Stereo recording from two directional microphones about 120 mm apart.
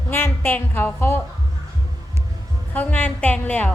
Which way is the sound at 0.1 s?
20° left (ahead or behind).